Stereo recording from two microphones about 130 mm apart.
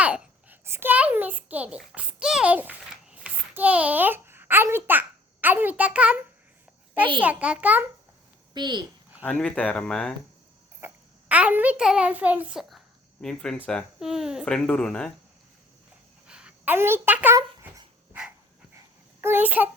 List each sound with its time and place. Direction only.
0.0 s a child's voice: 10° right (ahead or behind)
8.5 s a child's voice: 35° right (ahead or behind)
9.2 s speech: 10° left (ahead or behind)
10.8 s a child's voice: 15° right (ahead or behind)
14.4 s speech: 5° left (ahead or behind)
16.2 s a sound: 5° right (ahead or behind)
16.7 s a child's voice: 15° right (ahead or behind)
18.1 s dog: 15° right (ahead or behind)
19.2 s a child's voice: 15° right (ahead or behind)